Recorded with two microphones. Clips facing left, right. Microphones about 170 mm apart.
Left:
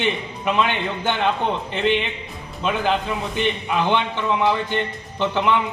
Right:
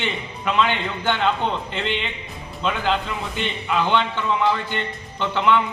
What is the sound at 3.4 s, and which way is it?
A man's voice, 15° left (ahead or behind).